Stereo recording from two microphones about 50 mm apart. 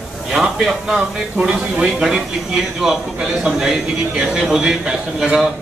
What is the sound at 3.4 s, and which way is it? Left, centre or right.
A man's voice, centre.